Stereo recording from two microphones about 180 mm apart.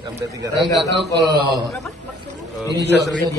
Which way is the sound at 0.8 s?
70° right (ahead or behind).